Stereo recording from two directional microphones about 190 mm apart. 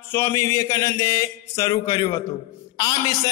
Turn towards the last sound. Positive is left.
turn(degrees=20)  # may be behind; listen again after turning